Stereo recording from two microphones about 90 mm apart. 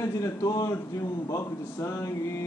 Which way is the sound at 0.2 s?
40° left (ahead or behind).